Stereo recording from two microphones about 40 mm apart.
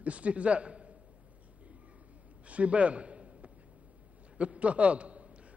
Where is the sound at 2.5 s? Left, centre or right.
Right.